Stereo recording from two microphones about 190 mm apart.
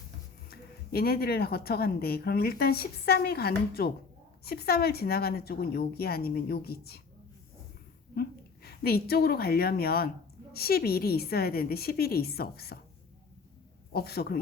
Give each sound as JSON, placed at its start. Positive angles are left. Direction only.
{"t": 0.5, "sound": "speech", "side_deg": 55}
{"t": 8.1, "sound": "a woman's voice", "side_deg": 55}
{"t": 13.9, "sound": "speech", "side_deg": 55}